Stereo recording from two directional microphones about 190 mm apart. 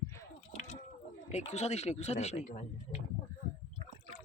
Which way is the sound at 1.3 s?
35° left (ahead or behind).